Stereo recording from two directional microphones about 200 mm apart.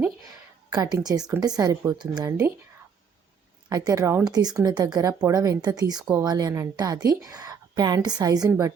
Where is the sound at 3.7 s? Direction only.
20° right (ahead or behind).